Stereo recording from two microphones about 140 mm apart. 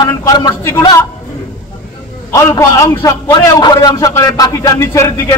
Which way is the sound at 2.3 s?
20° left (ahead or behind).